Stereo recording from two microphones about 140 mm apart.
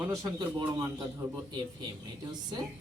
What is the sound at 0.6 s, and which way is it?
Speech, 25° right (ahead or behind).